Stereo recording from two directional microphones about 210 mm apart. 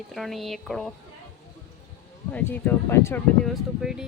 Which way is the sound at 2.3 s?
10° left (ahead or behind).